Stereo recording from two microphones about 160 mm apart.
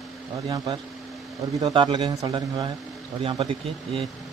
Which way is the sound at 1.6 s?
30° right (ahead or behind).